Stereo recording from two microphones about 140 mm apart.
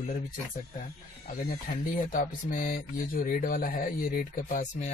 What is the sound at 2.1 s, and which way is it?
Speech, 75° left (ahead or behind).